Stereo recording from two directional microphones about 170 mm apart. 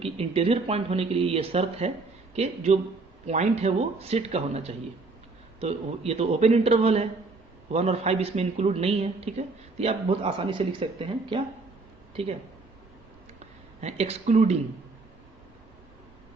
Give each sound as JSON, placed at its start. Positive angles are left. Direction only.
{"t": 0.0, "sound": "speech", "side_deg": -35}
{"t": 12.1, "sound": "speech", "side_deg": -35}
{"t": 13.4, "sound": "speech", "side_deg": -40}